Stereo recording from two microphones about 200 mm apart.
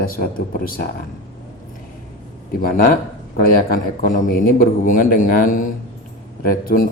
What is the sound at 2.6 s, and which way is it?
A man's voice, 45° left (ahead or behind).